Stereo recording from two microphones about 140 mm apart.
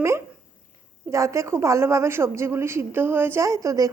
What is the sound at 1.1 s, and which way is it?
A woman's voice, 20° right (ahead or behind).